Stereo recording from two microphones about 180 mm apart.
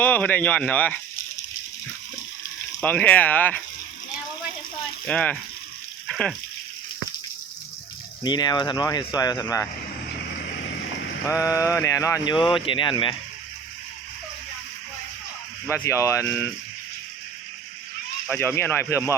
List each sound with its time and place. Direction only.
0.0 s speech: 10° left (ahead or behind)
2.8 s speech: 10° left (ahead or behind)
5.0 s speech: 5° left (ahead or behind)
6.1 s frying: 5° left (ahead or behind)
8.2 s speech: 25° left (ahead or behind)
11.3 s speech: 15° left (ahead or behind)
15.7 s speech: 15° left (ahead or behind)
18.3 s speech: 15° left (ahead or behind)